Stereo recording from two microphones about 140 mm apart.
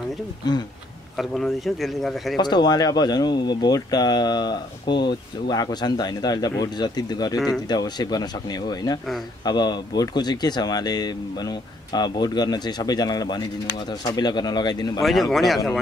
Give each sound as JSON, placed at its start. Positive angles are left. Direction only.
{"t": 1.1, "sound": "speech", "side_deg": 0}
{"t": 2.3, "sound": "speech", "side_deg": 30}
{"t": 7.3, "sound": "speech", "side_deg": 0}
{"t": 7.6, "sound": "speech", "side_deg": 30}
{"t": 15.0, "sound": "speech", "side_deg": 0}